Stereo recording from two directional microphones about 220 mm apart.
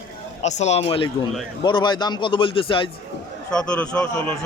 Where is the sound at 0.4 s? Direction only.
30° left (ahead or behind).